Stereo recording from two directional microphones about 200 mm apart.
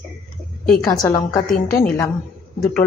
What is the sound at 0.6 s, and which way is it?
Speech, 5° left (ahead or behind).